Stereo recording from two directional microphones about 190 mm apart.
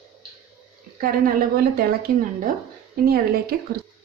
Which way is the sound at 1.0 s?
50° right (ahead or behind).